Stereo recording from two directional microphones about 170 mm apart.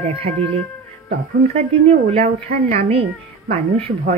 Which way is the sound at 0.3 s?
45° right (ahead or behind).